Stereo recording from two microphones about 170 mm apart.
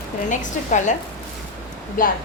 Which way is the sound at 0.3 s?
45° left (ahead or behind).